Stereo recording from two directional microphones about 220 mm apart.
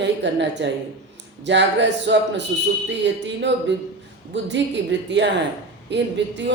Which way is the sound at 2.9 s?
55° right (ahead or behind).